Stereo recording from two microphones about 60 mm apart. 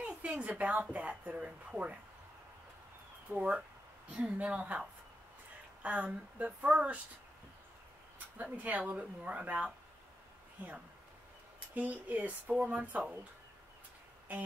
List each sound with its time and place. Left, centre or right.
0.0 s a sound: right
0.9 s speech: right
3.3 s speech: right
8.4 s speech: right
11.7 s speech: right
14.3 s speech: right